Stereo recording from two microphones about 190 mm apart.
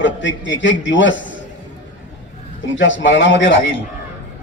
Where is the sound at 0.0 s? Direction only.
75° left (ahead or behind).